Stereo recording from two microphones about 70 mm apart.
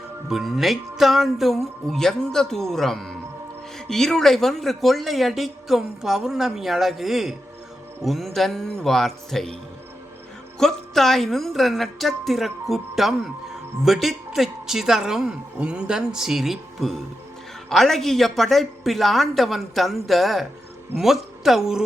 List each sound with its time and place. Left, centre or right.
0.3 s speech: centre
10.6 s a man's voice: centre